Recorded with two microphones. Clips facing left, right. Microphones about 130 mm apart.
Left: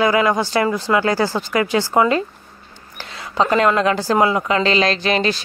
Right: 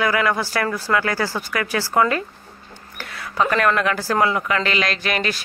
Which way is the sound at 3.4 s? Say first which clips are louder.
Left 3 dB; 25° left (ahead or behind).